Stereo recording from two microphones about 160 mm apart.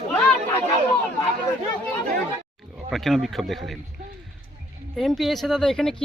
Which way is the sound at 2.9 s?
Centre (ahead or behind).